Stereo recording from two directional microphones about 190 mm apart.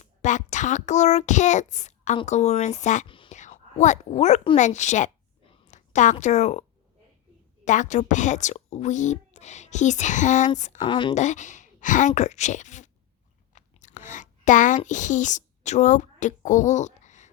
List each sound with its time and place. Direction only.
0.0 s a child's voice: 40° left (ahead or behind)
3.1 s whispering: 25° left (ahead or behind)
3.3 s a woman's voice: 40° left (ahead or behind)
10.8 s speech: 25° left (ahead or behind)
11.1 s a woman's voice: 40° left (ahead or behind)
13.5 s chewing: 40° left (ahead or behind)
14.8 s a woman's voice: 40° left (ahead or behind)